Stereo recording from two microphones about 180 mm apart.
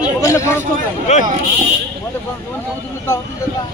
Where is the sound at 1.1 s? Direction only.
40° left (ahead or behind).